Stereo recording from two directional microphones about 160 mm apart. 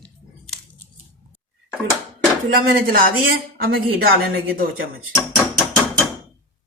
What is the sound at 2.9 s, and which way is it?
Speech, 65° right (ahead or behind).